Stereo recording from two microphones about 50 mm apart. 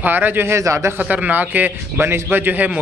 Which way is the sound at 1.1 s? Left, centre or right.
Right.